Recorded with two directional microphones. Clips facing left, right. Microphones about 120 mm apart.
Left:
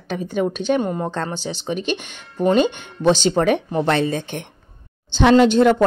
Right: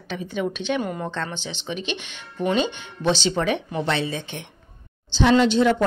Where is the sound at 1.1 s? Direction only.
40° left (ahead or behind).